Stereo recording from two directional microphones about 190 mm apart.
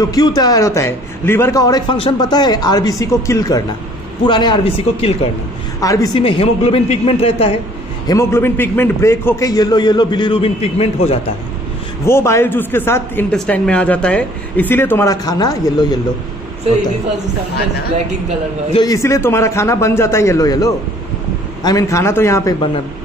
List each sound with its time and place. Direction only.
0.0 s a man's voice: 20° left (ahead or behind)
5.8 s a man's voice: 20° left (ahead or behind)
8.1 s a man's voice: 15° left (ahead or behind); by 11.1 s 30° left (ahead or behind)
12.0 s speech: 15° left (ahead or behind)
18.7 s speech: 20° left (ahead or behind)